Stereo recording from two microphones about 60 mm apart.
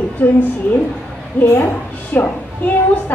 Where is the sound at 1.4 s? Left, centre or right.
Left.